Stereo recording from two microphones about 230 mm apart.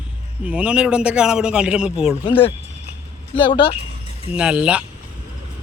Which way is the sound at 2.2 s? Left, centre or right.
Left.